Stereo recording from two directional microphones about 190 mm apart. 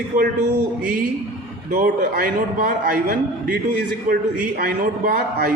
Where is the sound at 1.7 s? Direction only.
45° right (ahead or behind).